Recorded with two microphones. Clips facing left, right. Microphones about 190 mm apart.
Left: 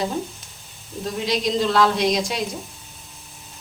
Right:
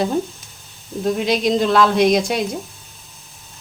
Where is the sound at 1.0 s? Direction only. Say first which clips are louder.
Right 6 dB; 55° right (ahead or behind).